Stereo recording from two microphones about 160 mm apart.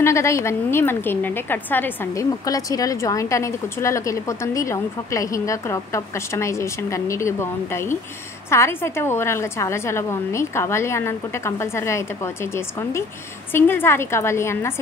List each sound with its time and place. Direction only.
0.0 s a woman's voice: 20° left (ahead or behind)
13.5 s a woman's voice: 15° left (ahead or behind)